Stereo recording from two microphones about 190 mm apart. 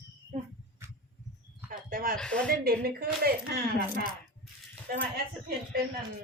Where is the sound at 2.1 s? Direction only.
5° left (ahead or behind).